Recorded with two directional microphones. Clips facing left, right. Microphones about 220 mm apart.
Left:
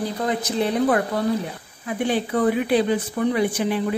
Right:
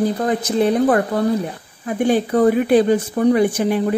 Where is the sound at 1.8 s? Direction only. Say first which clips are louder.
Right 6 dB; 45° right (ahead or behind).